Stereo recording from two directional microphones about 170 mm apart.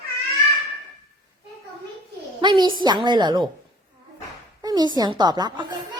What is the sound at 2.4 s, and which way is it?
A woman's voice, 25° right (ahead or behind).